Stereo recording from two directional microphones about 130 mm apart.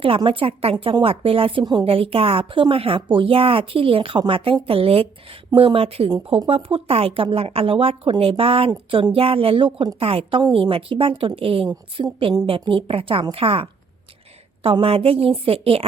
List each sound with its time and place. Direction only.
0.3 s a woman's voice: 45° right (ahead or behind)